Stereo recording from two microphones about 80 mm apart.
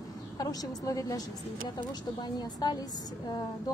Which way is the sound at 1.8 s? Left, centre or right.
Left.